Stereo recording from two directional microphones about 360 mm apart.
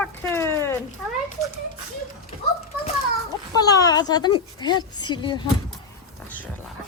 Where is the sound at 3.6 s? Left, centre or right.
Centre.